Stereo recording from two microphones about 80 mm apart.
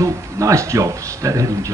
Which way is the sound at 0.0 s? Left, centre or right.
Right.